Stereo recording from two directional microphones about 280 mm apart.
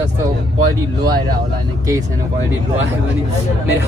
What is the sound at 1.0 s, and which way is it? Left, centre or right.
Speech, centre.